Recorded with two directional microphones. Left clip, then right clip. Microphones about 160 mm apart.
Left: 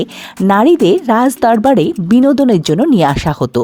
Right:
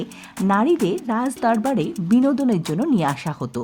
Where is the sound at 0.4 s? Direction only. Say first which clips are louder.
Left 10 dB; 50° left (ahead or behind).